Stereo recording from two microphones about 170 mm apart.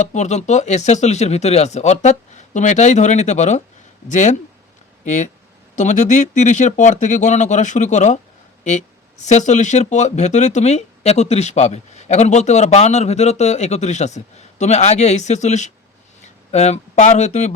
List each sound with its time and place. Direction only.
0.0 s speech: 45° left (ahead or behind)
9.3 s speech: 45° left (ahead or behind)